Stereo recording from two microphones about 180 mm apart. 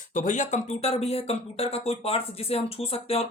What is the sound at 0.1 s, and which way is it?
Speech, 45° left (ahead or behind).